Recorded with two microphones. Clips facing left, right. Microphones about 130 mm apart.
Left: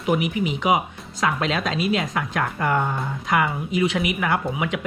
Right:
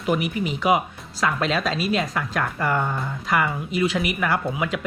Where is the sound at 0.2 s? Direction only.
40° right (ahead or behind).